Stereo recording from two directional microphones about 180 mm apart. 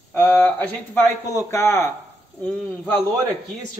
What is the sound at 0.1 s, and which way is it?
A man's voice, 10° left (ahead or behind).